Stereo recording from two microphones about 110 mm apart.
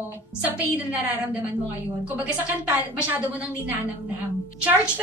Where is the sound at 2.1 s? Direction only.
15° right (ahead or behind).